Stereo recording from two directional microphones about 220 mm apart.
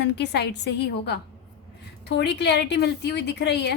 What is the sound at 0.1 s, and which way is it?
A woman's voice, 50° left (ahead or behind).